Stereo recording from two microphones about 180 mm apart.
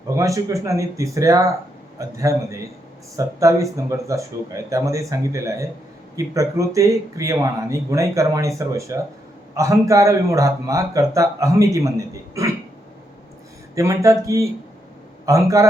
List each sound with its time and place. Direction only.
0.2 s speech: 20° right (ahead or behind)
13.7 s speech: 15° right (ahead or behind)